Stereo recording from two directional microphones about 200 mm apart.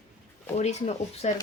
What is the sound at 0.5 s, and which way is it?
Speech, 35° left (ahead or behind).